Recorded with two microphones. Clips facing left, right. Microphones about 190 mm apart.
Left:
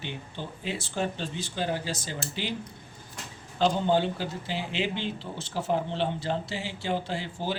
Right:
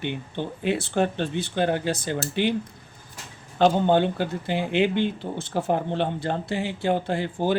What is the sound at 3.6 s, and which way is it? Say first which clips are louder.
Speech: right 5 dB; 60° right (ahead or behind).